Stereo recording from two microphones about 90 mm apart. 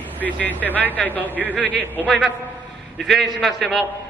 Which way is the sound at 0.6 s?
20° left (ahead or behind).